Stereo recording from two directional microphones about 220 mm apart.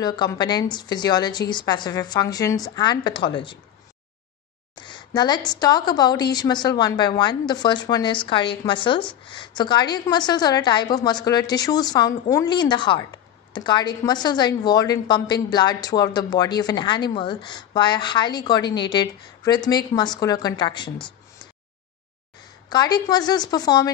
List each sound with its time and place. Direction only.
0.0 s a woman's voice: 20° left (ahead or behind)
4.8 s a woman's voice: 20° left (ahead or behind)
22.7 s a woman's voice: 20° left (ahead or behind)